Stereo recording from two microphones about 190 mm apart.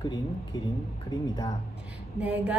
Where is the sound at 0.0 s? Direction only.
20° left (ahead or behind).